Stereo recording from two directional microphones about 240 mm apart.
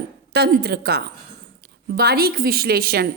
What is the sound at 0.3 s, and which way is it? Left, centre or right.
A woman's voice, right.